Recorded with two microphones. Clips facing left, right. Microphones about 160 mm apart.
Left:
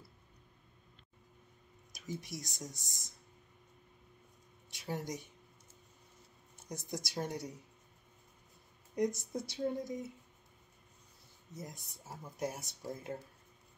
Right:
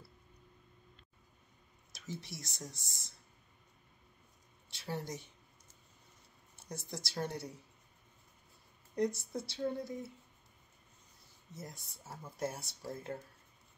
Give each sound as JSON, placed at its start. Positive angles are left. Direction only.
{"t": 1.9, "sound": "speech", "side_deg": 15}
{"t": 4.7, "sound": "speech", "side_deg": 15}
{"t": 6.5, "sound": "speech", "side_deg": 20}
{"t": 8.9, "sound": "speech", "side_deg": 20}
{"t": 11.5, "sound": "speech", "side_deg": 15}